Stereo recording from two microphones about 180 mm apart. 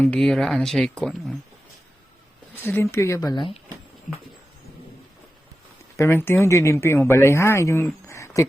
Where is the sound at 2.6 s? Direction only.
15° left (ahead or behind).